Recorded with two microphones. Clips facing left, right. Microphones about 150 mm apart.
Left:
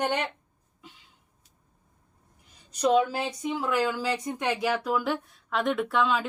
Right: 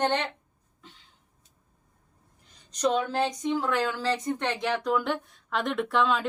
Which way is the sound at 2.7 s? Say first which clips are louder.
Left 3 dB; 10° left (ahead or behind).